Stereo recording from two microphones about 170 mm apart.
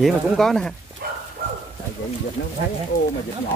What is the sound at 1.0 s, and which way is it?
Dog, 65° right (ahead or behind).